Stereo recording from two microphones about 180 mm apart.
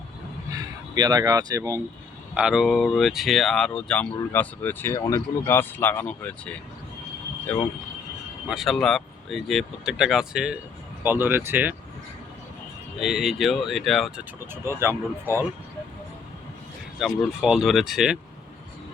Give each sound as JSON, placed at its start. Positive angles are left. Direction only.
{"t": 0.5, "sound": "speech", "side_deg": -20}
{"t": 2.3, "sound": "speech", "side_deg": -5}
{"t": 8.4, "sound": "speech", "side_deg": 0}
{"t": 13.0, "sound": "speech", "side_deg": 0}
{"t": 14.5, "sound": "speech", "side_deg": -15}
{"t": 17.0, "sound": "speech", "side_deg": 0}